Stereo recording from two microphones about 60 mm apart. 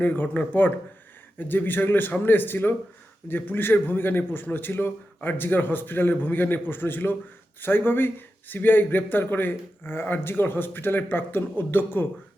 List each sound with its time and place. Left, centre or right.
0.0 s speech: left